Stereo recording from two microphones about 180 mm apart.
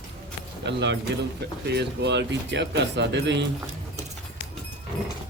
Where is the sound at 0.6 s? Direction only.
75° right (ahead or behind).